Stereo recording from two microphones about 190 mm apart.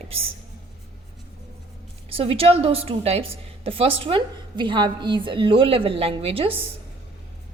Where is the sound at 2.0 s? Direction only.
30° right (ahead or behind).